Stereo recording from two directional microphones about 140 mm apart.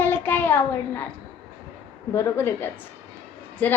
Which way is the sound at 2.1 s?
15° left (ahead or behind).